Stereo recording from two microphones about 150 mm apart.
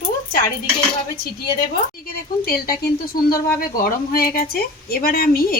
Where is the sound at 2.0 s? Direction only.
80° left.